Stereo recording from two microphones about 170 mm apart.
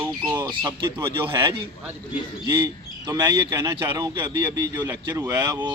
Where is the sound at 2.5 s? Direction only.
15° right (ahead or behind).